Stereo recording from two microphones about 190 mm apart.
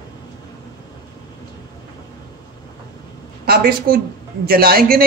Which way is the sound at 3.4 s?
50° right (ahead or behind).